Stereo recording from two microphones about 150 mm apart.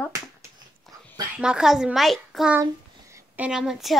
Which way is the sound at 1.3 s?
5° right (ahead or behind).